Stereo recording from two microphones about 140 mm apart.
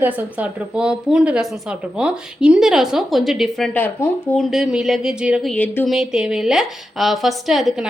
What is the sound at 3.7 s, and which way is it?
Speech, 15° left (ahead or behind).